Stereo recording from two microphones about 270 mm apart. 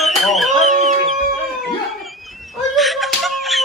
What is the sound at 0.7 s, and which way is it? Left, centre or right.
Chicken, right.